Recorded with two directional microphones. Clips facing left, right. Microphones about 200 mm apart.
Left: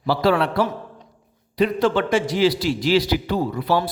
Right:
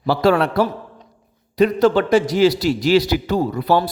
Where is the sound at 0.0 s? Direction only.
45° right (ahead or behind).